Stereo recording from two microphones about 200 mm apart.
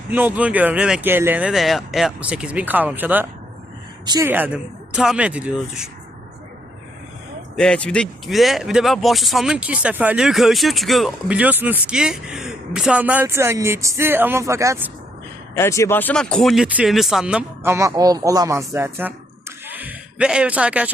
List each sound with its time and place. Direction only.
0.1 s speech: 10° right (ahead or behind)
4.0 s speech: 20° right (ahead or behind)
4.3 s speech: 10° right (ahead or behind)
7.5 s speech: 5° left (ahead or behind); by 14.8 s 15° right (ahead or behind)
15.5 s speech: 15° left (ahead or behind); by 19.1 s 10° right (ahead or behind)
19.6 s a sound: 10° right (ahead or behind)